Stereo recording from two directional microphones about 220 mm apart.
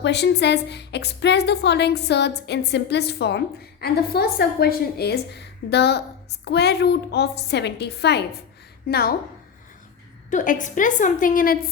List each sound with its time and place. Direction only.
0.0 s a woman's voice: 50° left (ahead or behind)
10.2 s a woman's voice: 35° left (ahead or behind)